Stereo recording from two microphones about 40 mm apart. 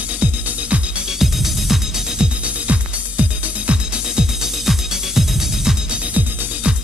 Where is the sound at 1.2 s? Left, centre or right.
Centre.